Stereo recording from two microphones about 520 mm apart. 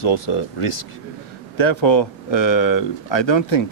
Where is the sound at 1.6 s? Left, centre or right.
Left.